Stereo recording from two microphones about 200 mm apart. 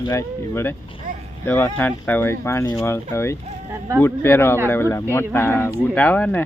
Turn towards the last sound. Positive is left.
turn(degrees=10)  # may be behind; listen again after turning